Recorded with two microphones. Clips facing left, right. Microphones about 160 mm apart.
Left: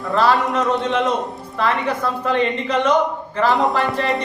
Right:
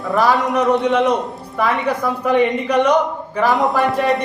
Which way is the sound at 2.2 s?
10° right (ahead or behind).